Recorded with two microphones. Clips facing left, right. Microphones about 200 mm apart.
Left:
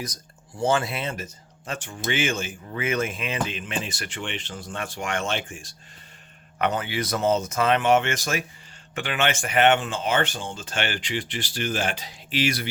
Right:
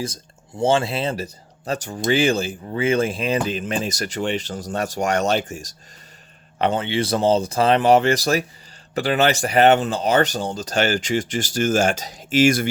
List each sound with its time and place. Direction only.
0.0 s speech: 25° right (ahead or behind)
6.6 s speech: 30° right (ahead or behind); by 12.6 s 45° right (ahead or behind)